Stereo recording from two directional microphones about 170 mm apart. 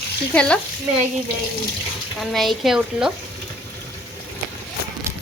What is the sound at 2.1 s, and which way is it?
Speech, centre (ahead or behind).